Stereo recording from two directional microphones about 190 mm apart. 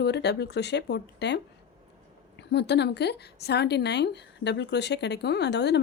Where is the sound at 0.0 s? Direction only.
60° left (ahead or behind).